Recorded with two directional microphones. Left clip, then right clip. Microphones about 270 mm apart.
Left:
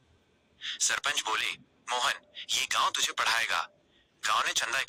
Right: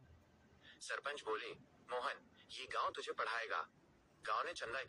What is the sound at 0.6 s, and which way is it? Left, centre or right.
Speech, left.